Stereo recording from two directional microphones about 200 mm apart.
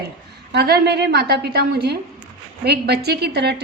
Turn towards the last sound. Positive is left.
turn(degrees=-55)  # may be behind; listen again after turning